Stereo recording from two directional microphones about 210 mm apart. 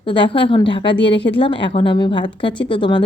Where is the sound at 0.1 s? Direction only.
25° left (ahead or behind).